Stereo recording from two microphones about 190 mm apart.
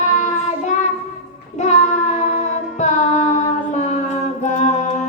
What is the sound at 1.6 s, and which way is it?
Music, 35° left (ahead or behind).